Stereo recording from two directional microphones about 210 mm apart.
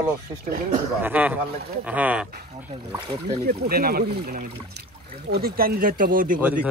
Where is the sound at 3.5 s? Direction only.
45° right (ahead or behind).